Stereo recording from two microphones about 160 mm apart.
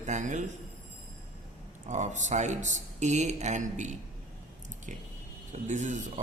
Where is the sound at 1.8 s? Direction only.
50° right (ahead or behind).